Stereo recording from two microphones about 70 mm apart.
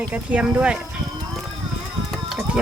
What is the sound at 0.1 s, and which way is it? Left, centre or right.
Speech, centre.